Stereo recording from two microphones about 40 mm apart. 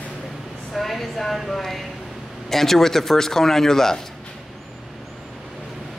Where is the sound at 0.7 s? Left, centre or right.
Centre.